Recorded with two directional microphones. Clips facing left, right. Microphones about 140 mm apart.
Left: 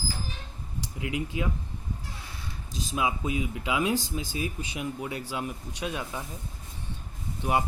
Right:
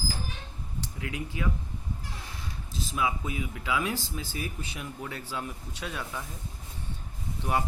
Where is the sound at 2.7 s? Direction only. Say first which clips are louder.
Left 1 dB; 20° left (ahead or behind).